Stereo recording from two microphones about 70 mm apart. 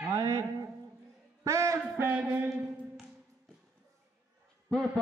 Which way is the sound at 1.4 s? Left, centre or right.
Right.